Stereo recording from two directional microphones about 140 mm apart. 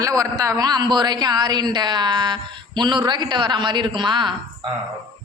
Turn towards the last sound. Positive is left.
turn(degrees=-35)  # may be behind; listen again after turning